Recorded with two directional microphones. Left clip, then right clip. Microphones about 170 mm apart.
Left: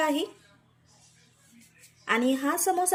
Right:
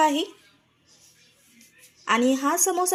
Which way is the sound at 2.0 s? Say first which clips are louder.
Right 4 dB; 40° right (ahead or behind).